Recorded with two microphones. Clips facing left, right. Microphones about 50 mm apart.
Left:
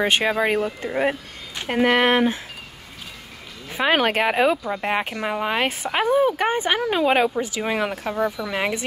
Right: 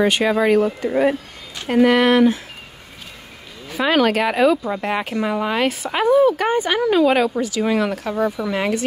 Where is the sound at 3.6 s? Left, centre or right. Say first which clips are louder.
Right 3 dB; left.